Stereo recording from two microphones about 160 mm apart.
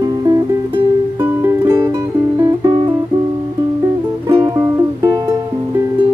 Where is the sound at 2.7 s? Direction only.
30° right (ahead or behind).